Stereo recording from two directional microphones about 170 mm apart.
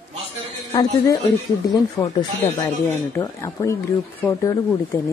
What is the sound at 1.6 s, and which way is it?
Speech, 20° left (ahead or behind).